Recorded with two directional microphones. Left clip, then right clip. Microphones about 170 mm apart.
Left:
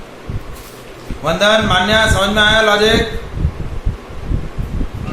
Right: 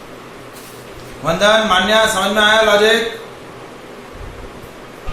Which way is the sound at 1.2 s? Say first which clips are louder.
Even; 30° left (ahead or behind).